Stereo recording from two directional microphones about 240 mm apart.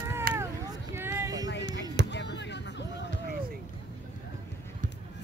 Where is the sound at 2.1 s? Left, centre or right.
Left.